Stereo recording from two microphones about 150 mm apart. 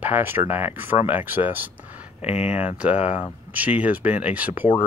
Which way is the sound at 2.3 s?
45° left (ahead or behind).